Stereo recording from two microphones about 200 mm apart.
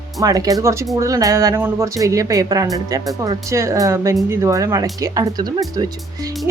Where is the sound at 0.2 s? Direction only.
15° right (ahead or behind).